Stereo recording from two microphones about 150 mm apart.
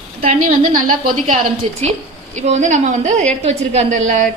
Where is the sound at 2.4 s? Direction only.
50° right (ahead or behind).